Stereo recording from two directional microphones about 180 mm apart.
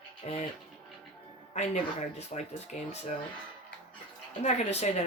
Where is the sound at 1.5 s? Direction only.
40° left (ahead or behind).